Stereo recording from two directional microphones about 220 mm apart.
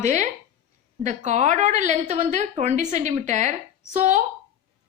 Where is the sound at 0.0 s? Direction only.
35° right (ahead or behind).